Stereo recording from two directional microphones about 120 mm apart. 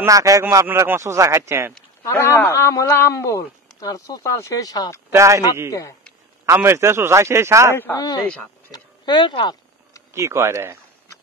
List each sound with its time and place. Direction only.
0.0 s speech: 25° right (ahead or behind)
2.0 s speech: 20° left (ahead or behind)
5.1 s speech: 25° right (ahead or behind)
5.7 s speech: 25° left (ahead or behind)
6.4 s speech: 20° right (ahead or behind)
7.7 s speech: 20° left (ahead or behind)
8.7 s speech: 35° left (ahead or behind)
10.1 s speech: 25° right (ahead or behind)